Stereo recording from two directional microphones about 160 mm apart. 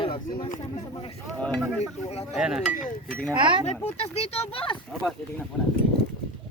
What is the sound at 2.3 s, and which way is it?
Speech, 5° right (ahead or behind).